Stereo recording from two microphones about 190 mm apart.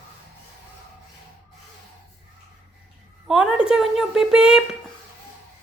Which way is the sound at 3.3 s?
5° right (ahead or behind).